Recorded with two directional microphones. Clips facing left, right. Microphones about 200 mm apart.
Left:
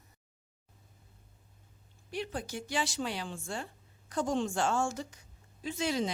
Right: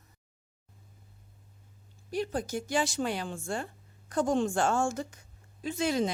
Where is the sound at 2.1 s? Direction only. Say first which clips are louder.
Right 5 dB; 40° right (ahead or behind).